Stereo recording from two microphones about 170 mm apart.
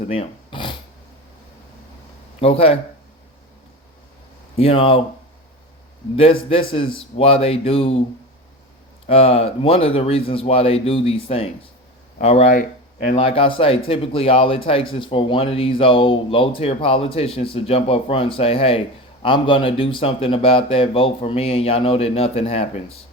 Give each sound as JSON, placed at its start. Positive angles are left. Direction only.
{"t": 0.1, "sound": "a sound", "side_deg": 30}
{"t": 2.4, "sound": "speech", "side_deg": 35}
{"t": 4.5, "sound": "speech", "side_deg": 35}
{"t": 6.5, "sound": "speech", "side_deg": 35}
{"t": 9.0, "sound": "speech", "side_deg": 35}